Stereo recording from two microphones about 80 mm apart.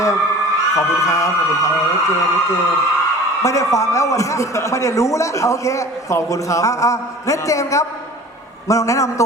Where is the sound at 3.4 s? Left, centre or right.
Left.